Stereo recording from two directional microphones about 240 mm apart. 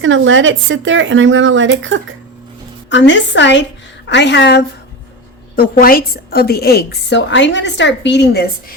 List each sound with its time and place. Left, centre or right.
0.0 s speech: right
2.9 s a woman's voice: left